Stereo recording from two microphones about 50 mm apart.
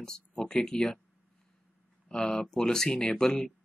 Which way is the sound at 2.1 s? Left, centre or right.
Centre.